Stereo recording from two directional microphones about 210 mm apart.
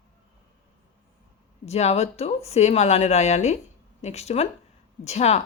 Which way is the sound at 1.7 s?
30° left (ahead or behind).